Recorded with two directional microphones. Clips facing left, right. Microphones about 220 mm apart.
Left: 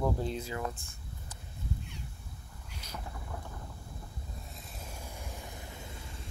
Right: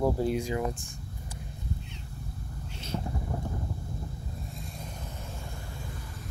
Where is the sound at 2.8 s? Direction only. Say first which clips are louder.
Right 10 dB; 30° right (ahead or behind).